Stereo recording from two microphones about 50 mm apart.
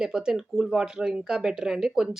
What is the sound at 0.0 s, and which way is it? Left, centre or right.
Speech, centre.